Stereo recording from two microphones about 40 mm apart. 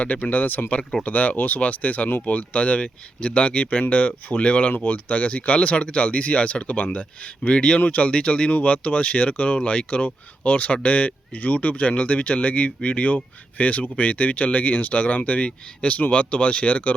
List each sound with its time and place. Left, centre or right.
0.0 s speech: left
4.7 s speech: left
5.0 s speech: left
9.6 s speech: left
10.0 s speech: left